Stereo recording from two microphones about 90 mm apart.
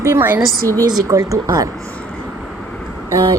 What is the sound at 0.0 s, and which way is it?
Speech, 25° right (ahead or behind).